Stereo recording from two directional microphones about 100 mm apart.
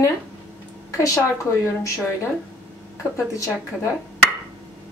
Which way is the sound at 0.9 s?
30° left (ahead or behind).